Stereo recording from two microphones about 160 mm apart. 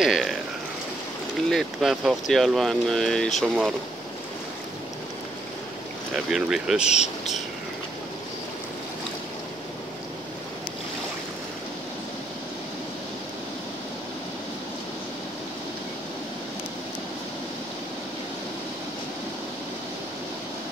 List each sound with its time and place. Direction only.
0.0 s a sound: centre (ahead or behind)
1.5 s speech: centre (ahead or behind)
6.1 s speech: 5° right (ahead or behind)
6.9 s speech: 45° left (ahead or behind)